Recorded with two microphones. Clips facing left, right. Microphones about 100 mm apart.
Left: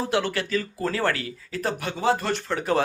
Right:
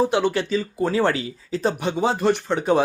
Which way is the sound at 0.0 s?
20° right (ahead or behind).